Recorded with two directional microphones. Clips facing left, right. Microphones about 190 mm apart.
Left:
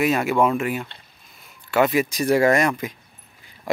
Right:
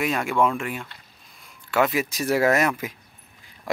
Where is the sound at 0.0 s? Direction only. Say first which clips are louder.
Left 3 dB; 5° left (ahead or behind).